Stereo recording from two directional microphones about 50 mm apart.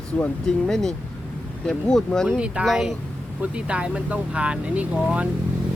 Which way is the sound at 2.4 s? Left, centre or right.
Right.